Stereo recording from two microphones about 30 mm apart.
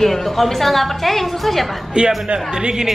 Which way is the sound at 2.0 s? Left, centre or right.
Right.